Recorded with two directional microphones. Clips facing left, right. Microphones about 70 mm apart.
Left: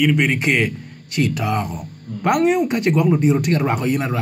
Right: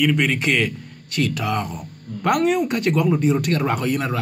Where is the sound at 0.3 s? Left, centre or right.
Centre.